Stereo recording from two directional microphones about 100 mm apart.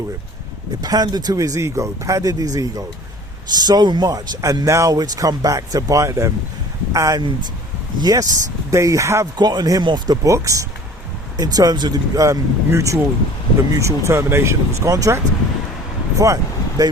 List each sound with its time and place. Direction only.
0.8 s speech: 40° right (ahead or behind)
9.4 s speech: 45° right (ahead or behind)
16.1 s vehicle: 35° right (ahead or behind)